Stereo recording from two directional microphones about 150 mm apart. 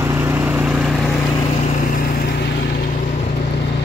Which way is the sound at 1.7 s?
65° left (ahead or behind).